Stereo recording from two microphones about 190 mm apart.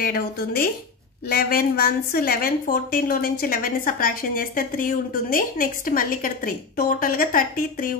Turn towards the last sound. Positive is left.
turn(degrees=45)  # may be behind; listen again after turning